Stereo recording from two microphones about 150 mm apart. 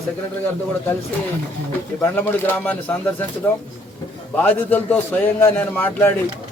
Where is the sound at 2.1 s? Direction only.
10° left (ahead or behind).